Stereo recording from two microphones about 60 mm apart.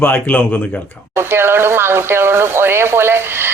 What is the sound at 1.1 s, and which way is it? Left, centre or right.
Speech, right.